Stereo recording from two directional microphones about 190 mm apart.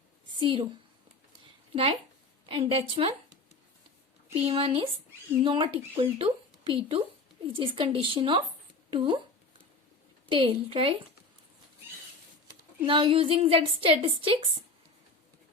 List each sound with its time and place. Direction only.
0.3 s a woman's voice: 25° right (ahead or behind)
1.7 s a woman's voice: 30° right (ahead or behind)
4.4 s speech: 30° right (ahead or behind)
10.2 s speech: 25° right (ahead or behind)
12.8 s speech: 25° right (ahead or behind)